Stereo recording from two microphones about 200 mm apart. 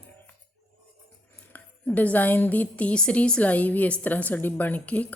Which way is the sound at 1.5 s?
5° left (ahead or behind).